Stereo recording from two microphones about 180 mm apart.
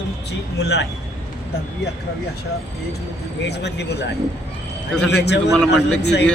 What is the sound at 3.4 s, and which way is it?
Speech, 70° left (ahead or behind).